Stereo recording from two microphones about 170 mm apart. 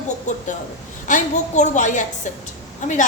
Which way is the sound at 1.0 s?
45° left (ahead or behind).